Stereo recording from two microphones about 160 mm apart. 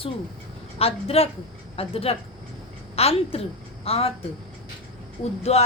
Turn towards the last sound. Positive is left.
turn(degrees=40)  # may be behind; listen again after turning